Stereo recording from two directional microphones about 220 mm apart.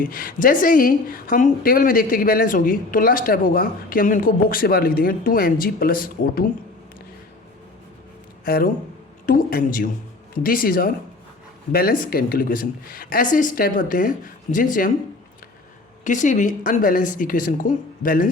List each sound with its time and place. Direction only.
0.0 s a woman's voice: 40° left (ahead or behind)
8.4 s a woman's voice: 45° left (ahead or behind)
16.0 s a woman's voice: 35° left (ahead or behind)